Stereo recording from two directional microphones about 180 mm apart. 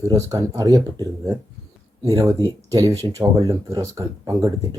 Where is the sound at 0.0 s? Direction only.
20° right (ahead or behind).